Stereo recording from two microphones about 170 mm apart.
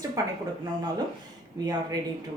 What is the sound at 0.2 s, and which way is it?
Speech, 20° right (ahead or behind).